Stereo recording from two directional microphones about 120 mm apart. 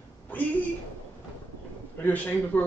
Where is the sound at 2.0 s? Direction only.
15° left (ahead or behind).